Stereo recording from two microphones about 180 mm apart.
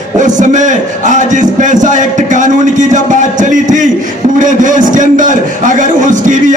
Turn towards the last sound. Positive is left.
turn(degrees=-45)  # may be behind; listen again after turning